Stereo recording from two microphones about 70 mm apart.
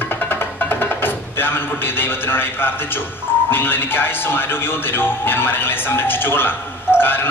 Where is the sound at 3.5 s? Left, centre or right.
Left.